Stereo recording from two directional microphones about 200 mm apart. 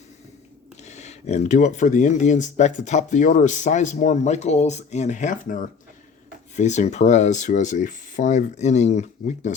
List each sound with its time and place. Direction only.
0.9 s speech: 35° left (ahead or behind)